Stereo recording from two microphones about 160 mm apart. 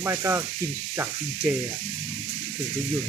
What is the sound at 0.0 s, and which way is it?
Speech, 15° right (ahead or behind).